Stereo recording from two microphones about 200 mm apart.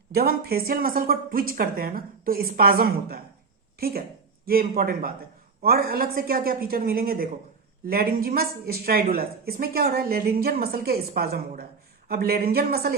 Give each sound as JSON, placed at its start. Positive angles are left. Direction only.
{"t": 0.1, "sound": "speech", "side_deg": -50}